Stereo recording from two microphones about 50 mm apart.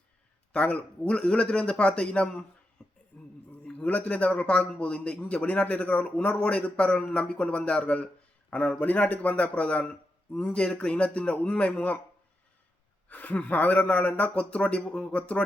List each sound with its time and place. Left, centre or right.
0.5 s a man's voice: left
2.8 s a sound: centre
3.5 s a man's voice: left
13.1 s a man's voice: left